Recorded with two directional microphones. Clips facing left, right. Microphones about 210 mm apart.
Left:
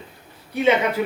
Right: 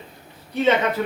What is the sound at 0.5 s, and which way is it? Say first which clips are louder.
Speech: left 1 dB; 10° left (ahead or behind).